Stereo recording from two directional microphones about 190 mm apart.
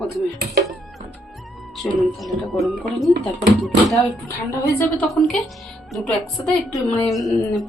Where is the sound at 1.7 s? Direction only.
Centre (ahead or behind).